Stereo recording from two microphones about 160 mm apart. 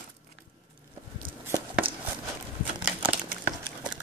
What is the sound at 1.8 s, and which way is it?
Walk, 35° right (ahead or behind).